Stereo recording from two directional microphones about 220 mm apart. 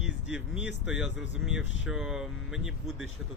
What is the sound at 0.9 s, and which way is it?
Speech, 5° right (ahead or behind).